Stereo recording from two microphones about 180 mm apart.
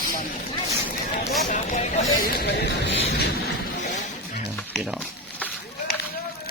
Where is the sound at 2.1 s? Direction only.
65° left (ahead or behind).